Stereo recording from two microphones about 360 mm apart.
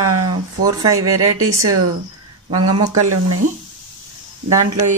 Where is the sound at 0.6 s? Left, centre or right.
Centre.